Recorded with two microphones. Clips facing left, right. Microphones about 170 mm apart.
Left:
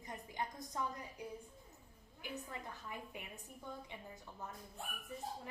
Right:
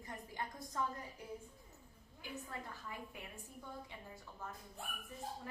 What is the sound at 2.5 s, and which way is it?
A woman's voice, 20° left (ahead or behind).